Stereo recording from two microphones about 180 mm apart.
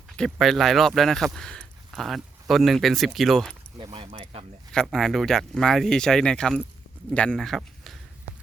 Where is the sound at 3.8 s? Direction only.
30° right (ahead or behind).